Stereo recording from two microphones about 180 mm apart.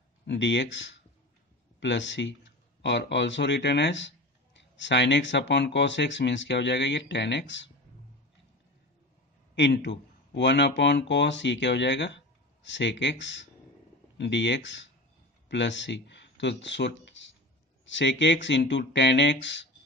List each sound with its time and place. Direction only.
0.3 s speech: 80° left
2.8 s speech: 75° left (ahead or behind)
9.6 s a man's voice: 75° left (ahead or behind)
19.4 s speech: 90° left